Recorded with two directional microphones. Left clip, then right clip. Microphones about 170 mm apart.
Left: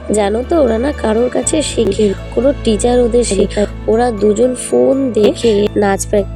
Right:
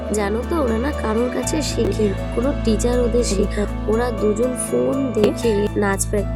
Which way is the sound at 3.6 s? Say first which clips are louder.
Left 8 dB; 15° left (ahead or behind).